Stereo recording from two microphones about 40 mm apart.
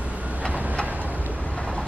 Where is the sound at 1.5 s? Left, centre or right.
Left.